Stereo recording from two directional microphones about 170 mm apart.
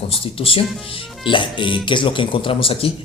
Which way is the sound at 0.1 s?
35° left (ahead or behind).